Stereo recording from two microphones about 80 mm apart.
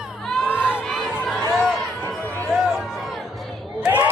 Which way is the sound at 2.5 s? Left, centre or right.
Centre.